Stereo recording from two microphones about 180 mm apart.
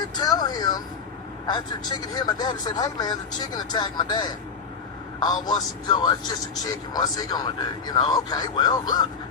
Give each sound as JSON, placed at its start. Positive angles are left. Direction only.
{"t": 0.0, "sound": "vehicle", "side_deg": 20}
{"t": 1.5, "sound": "a man's voice", "side_deg": 25}